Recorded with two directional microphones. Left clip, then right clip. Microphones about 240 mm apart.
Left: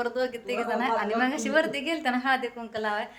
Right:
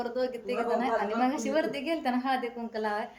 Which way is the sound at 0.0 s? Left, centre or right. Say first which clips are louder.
Left 3 dB; centre.